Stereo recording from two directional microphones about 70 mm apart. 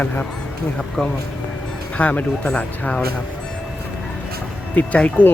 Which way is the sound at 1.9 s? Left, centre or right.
Left.